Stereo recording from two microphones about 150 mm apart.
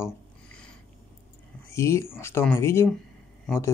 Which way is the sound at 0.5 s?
5° left (ahead or behind).